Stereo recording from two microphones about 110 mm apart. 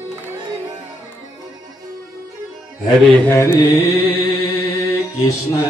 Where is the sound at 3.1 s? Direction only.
20° left (ahead or behind).